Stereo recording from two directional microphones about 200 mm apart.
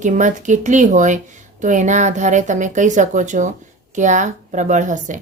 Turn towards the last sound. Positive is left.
turn(degrees=-40)  # may be behind; listen again after turning